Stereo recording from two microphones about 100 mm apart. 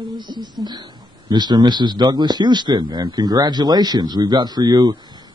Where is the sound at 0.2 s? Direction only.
45° right (ahead or behind).